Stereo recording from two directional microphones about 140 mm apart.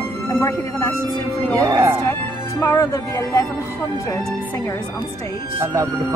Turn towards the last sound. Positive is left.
turn(degrees=-20)  # may be behind; listen again after turning